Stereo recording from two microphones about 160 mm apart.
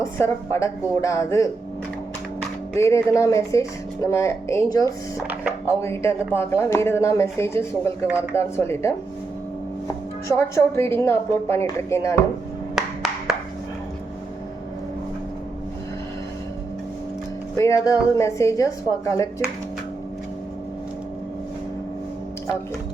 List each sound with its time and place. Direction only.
0.0 s speech: 20° left (ahead or behind)
2.7 s speech: 20° left (ahead or behind)
5.3 s speech: 10° right (ahead or behind)
5.6 s speech: 15° left (ahead or behind)
8.0 s speech: 10° right (ahead or behind)
8.4 s speech: 15° left (ahead or behind)
12.7 s a sound: centre (ahead or behind)
17.6 s speech: 20° left (ahead or behind)